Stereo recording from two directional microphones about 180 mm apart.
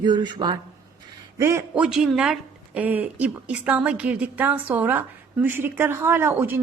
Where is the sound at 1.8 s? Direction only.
5° right (ahead or behind).